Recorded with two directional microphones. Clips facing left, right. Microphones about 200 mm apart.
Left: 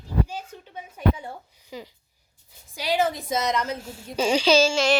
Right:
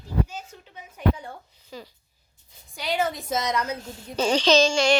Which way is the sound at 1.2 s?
15° left (ahead or behind).